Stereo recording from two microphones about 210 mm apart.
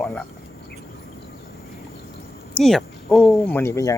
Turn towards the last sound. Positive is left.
turn(degrees=15)  # may be behind; listen again after turning